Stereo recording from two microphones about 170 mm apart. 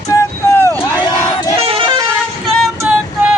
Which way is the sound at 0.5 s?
15° left (ahead or behind).